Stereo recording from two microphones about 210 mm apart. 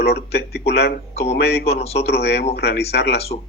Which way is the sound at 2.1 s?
50° left (ahead or behind).